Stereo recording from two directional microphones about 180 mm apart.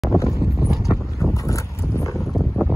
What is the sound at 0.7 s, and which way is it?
Clip-clop, centre (ahead or behind).